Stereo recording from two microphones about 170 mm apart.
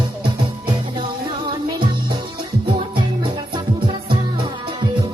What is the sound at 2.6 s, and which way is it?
Music, 30° right (ahead or behind).